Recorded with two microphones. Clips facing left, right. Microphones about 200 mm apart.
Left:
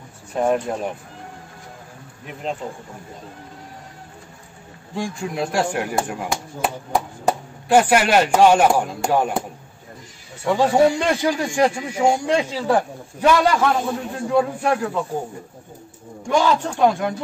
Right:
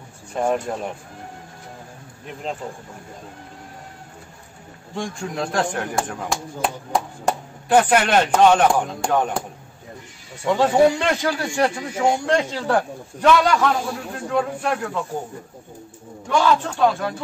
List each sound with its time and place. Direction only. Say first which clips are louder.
0.3 s speech: left 2 dB; 5° left (ahead or behind)
4.9 s a man's voice: left 2 dB; 5° left (ahead or behind)
7.7 s a man's voice: left 1 dB; 10° left (ahead or behind)
10.4 s a man's voice: even; 10° left (ahead or behind)
16.3 s a man's voice: even; 20° left (ahead or behind)